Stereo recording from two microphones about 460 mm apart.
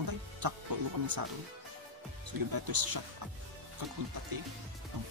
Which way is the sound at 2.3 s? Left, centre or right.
Right.